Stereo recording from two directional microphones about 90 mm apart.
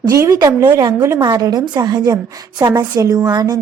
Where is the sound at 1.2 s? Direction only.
50° right (ahead or behind).